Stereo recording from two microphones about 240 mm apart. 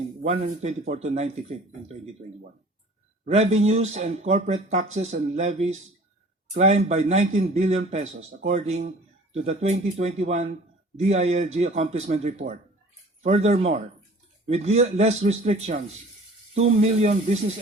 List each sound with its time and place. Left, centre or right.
0.3 s speech: right
3.2 s speech: right